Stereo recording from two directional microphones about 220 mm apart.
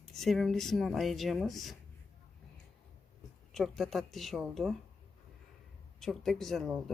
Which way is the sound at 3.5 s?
Centre (ahead or behind).